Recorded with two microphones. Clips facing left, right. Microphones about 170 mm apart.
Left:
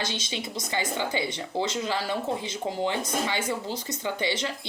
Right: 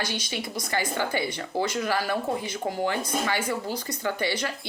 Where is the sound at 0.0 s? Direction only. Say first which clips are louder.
Right 1 dB; 25° left (ahead or behind).